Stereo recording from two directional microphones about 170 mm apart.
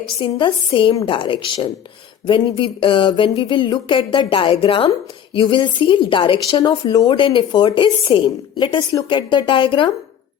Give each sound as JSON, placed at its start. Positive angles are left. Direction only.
{"t": 0.2, "sound": "a woman's voice", "side_deg": 30}